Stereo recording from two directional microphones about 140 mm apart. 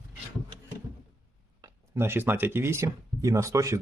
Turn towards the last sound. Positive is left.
turn(degrees=-20)  # may be behind; listen again after turning